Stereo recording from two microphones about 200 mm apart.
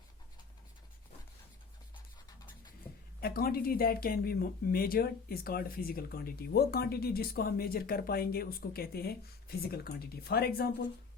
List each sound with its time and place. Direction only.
3.2 s speech: 50° left (ahead or behind)